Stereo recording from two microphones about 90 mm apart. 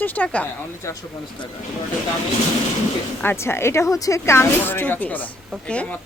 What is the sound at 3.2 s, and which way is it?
Speech, 30° left (ahead or behind).